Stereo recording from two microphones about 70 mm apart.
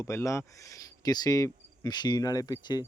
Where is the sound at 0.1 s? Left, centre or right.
Left.